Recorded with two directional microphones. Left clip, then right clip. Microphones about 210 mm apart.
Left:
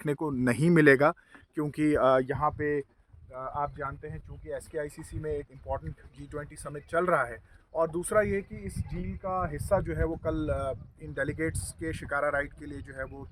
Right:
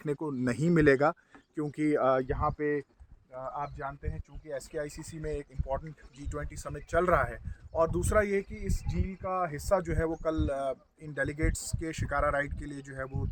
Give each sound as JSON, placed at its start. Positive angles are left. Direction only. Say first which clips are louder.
{"t": 0.0, "sound": "speech", "louder": "left 3 dB", "side_deg": 45}
{"t": 3.3, "sound": "speech", "louder": "left 4 dB", "side_deg": 40}